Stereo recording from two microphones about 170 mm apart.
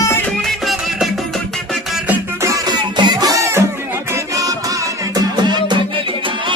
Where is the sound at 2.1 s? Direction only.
20° right (ahead or behind).